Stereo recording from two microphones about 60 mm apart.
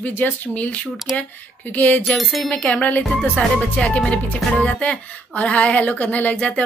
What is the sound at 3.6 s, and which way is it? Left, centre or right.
Speech, centre.